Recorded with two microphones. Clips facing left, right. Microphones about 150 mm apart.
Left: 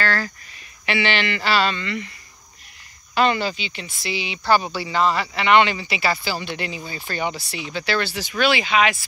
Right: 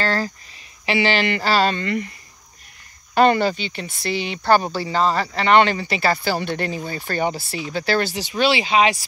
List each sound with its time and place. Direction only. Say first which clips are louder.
0.0 s a sound: right 2 dB; 35° right (ahead or behind)
0.8 s speech: right 3 dB; 35° right (ahead or behind)
3.2 s speech: right 4 dB; 50° right (ahead or behind); by 9.0 s 35° right (ahead or behind)